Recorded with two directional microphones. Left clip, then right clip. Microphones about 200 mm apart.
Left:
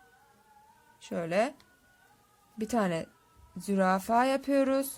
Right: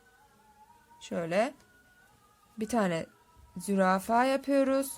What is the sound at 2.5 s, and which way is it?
Speech, centre (ahead or behind).